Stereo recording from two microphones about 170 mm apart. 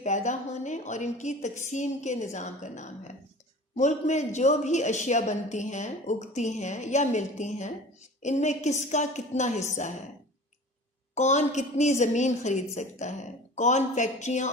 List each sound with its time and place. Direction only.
0.0 s a man's voice: 45° left (ahead or behind)
11.1 s a man's voice: 45° left (ahead or behind)